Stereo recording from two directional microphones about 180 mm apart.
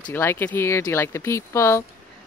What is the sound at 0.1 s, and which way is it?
Speech, 10° left (ahead or behind).